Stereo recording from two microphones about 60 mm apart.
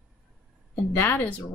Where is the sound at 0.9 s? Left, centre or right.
Left.